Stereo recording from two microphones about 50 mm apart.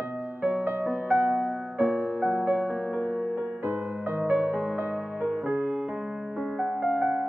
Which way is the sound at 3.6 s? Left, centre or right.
Right.